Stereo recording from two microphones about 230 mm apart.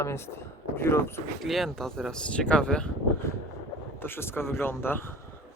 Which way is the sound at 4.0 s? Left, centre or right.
Centre.